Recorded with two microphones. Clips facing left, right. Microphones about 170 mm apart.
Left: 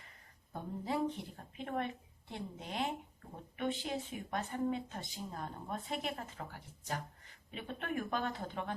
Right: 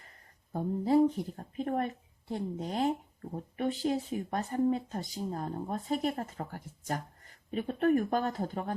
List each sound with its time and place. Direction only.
0.5 s speech: 40° right (ahead or behind)